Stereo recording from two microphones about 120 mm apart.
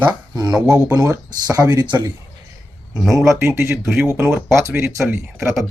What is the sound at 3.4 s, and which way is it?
Speech, 20° right (ahead or behind).